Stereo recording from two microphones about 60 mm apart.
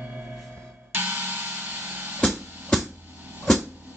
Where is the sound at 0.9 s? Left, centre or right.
Right.